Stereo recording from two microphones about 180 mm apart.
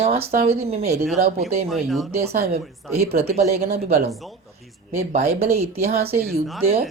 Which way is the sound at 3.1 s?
35° right (ahead or behind).